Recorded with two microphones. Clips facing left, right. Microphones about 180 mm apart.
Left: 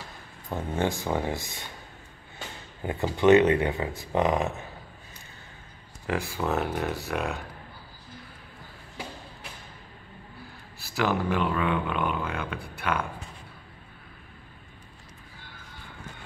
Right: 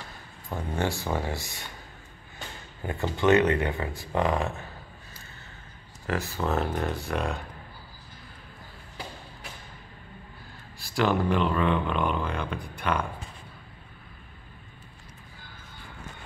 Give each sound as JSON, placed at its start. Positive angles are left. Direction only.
{"t": 0.7, "sound": "speech", "side_deg": 15}
{"t": 2.8, "sound": "speech", "side_deg": 20}
{"t": 6.0, "sound": "speech", "side_deg": 10}
{"t": 10.8, "sound": "speech", "side_deg": 5}